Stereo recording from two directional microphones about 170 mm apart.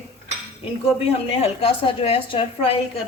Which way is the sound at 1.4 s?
35° left (ahead or behind).